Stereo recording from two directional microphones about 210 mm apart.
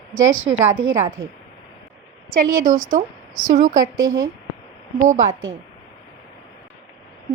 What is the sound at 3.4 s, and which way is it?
Speech, 40° right (ahead or behind).